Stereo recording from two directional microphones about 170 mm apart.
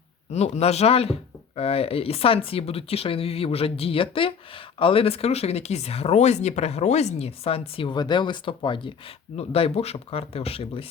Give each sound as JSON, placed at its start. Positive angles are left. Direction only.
{"t": 0.3, "sound": "speech", "side_deg": 40}